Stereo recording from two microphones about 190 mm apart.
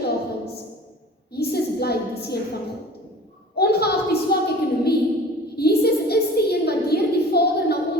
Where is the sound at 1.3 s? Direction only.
55° left (ahead or behind).